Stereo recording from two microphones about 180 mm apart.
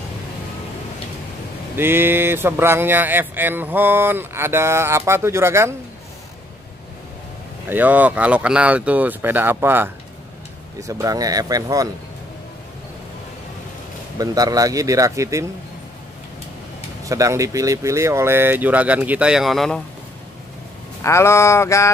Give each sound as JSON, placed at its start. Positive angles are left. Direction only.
{"t": 1.8, "sound": "speech", "side_deg": -10}
{"t": 7.6, "sound": "speech", "side_deg": -10}
{"t": 14.1, "sound": "speech", "side_deg": -20}
{"t": 17.0, "sound": "speech", "side_deg": -15}
{"t": 21.0, "sound": "a sound", "side_deg": 15}